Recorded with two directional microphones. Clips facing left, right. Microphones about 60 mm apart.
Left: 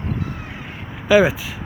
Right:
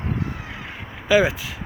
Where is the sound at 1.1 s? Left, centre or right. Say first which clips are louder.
Left 3 dB; centre.